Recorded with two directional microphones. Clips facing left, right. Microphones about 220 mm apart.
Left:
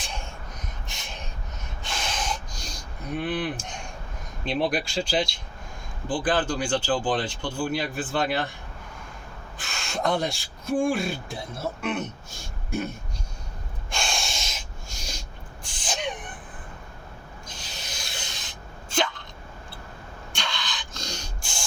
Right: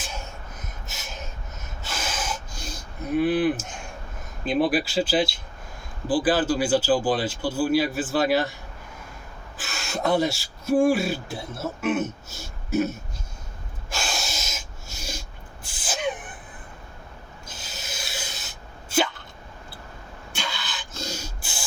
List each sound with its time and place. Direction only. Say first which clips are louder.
0.9 s gasp: right 2 dB; 5° right (ahead or behind)
4.4 s speech: right 4 dB; 5° right (ahead or behind)
9.6 s speech: right 1 dB; 5° right (ahead or behind)
13.9 s a sound: even; 5° right (ahead or behind)
15.6 s gasp: right 3 dB; 5° right (ahead or behind)
17.5 s sneeze: right 3 dB; 5° right (ahead or behind)
20.3 s a sound: right 1 dB; 5° right (ahead or behind)